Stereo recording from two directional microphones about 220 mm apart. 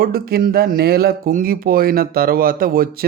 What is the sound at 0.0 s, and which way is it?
Speech, 45° right (ahead or behind).